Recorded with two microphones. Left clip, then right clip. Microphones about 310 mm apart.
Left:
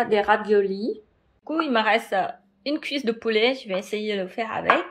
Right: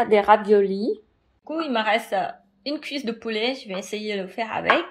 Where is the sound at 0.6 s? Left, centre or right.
Right.